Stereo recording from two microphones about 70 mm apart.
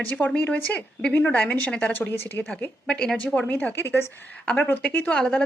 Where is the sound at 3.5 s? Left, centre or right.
Left.